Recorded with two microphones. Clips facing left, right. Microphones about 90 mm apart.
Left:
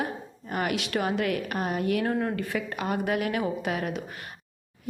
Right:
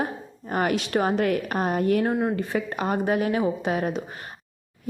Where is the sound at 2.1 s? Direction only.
20° right (ahead or behind).